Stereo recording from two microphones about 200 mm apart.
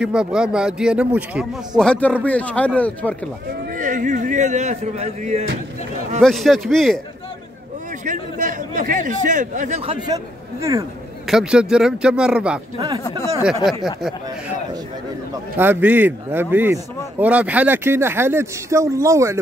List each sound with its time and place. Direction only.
0.0 s speech: 5° right (ahead or behind)
1.8 s speech: 5° left (ahead or behind)
3.7 s a man's voice: 40° right (ahead or behind)
6.2 s speech: centre (ahead or behind)
8.0 s a man's voice: 40° right (ahead or behind)
10.0 s speech: 15° right (ahead or behind)
11.2 s speech: 5° right (ahead or behind)
12.7 s speech: 20° right (ahead or behind)
15.5 s a man's voice: 10° right (ahead or behind)